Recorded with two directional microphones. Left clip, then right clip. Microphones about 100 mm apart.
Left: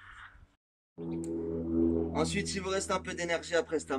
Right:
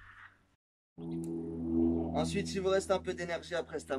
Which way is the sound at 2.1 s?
30° right (ahead or behind).